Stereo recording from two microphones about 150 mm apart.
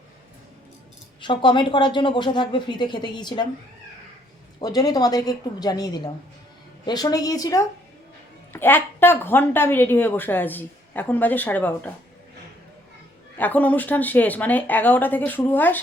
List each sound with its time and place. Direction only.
1.2 s speech: 30° left (ahead or behind)
4.6 s a woman's voice: 25° left (ahead or behind)
13.3 s speech: 10° left (ahead or behind)